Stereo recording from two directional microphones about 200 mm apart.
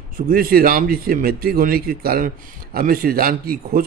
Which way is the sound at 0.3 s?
50° right (ahead or behind).